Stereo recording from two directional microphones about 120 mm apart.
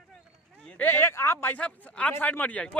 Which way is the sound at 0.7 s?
15° left (ahead or behind).